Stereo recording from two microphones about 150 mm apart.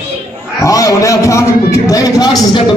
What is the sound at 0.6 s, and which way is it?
A man's voice, 20° left (ahead or behind).